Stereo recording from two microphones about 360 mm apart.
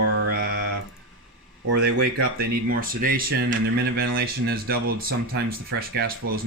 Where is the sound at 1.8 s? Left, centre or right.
Right.